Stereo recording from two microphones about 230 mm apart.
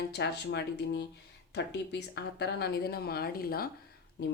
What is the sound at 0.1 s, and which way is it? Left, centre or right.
Speech, left.